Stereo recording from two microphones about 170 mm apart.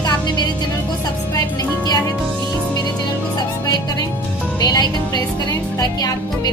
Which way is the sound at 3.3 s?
25° left (ahead or behind).